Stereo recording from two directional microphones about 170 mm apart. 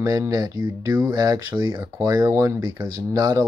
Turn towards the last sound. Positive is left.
turn(degrees=-20)  # may be behind; listen again after turning